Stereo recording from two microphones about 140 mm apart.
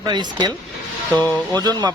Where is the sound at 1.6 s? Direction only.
30° right (ahead or behind).